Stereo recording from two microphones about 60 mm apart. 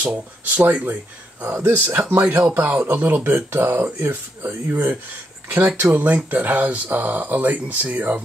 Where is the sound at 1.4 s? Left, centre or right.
Right.